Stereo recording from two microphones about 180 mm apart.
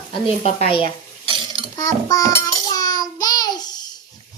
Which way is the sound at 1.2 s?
30° right (ahead or behind).